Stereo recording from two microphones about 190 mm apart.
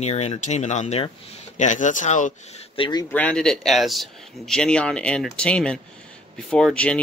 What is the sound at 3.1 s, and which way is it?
Speech, 5° left (ahead or behind).